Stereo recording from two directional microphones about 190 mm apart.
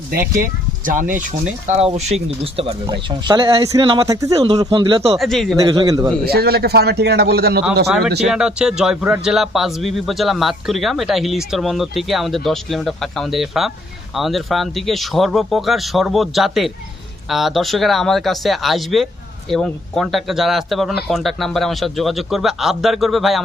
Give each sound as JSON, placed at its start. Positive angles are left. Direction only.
{"t": 0.4, "sound": "speech", "side_deg": -45}
{"t": 5.1, "sound": "a man's voice", "side_deg": 0}
{"t": 5.6, "sound": "speech", "side_deg": -20}
{"t": 6.2, "sound": "a man's voice", "side_deg": -55}
{"t": 7.9, "sound": "a man's voice", "side_deg": 0}